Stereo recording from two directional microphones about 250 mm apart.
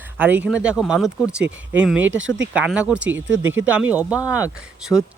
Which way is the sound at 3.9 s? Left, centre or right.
Centre.